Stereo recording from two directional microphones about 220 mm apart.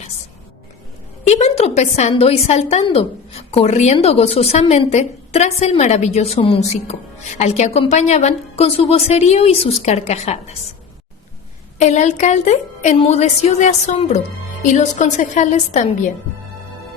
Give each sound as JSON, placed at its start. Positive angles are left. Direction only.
{"t": 1.3, "sound": "a woman's voice", "side_deg": 30}
{"t": 11.8, "sound": "a woman's voice", "side_deg": 30}